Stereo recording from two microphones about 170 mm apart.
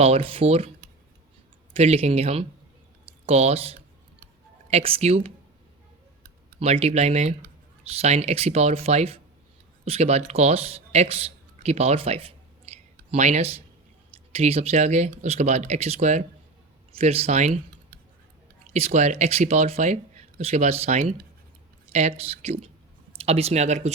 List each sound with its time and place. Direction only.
0.0 s speech: 35° right (ahead or behind)
1.7 s speech: 35° right (ahead or behind)
6.6 s speech: 35° right (ahead or behind)
18.7 s speech: 40° right (ahead or behind)